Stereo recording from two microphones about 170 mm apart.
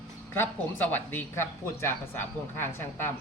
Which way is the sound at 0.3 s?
10° left (ahead or behind).